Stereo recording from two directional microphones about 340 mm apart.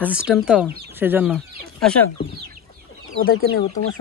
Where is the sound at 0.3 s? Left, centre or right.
Centre.